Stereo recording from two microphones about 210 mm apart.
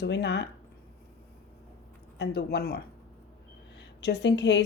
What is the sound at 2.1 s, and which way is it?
Speech, 50° left (ahead or behind).